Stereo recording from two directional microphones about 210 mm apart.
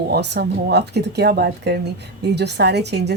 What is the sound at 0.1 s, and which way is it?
Speech, 50° right (ahead or behind).